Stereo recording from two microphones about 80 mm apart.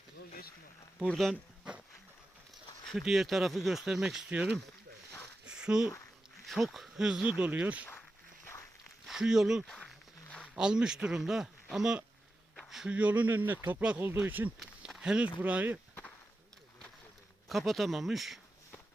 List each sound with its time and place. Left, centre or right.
2.9 s speech: centre
5.5 s a sound: centre
6.4 s speech: centre
9.0 s speech: centre
10.6 s speech: centre
12.5 s a sound: centre
12.9 s speech: centre
14.0 s speech: right
14.6 s a sound: centre
15.4 s speech: centre
17.5 s speech: centre